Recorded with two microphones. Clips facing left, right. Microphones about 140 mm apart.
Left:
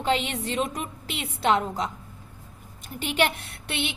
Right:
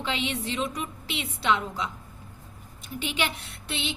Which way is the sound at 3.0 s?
55° left (ahead or behind).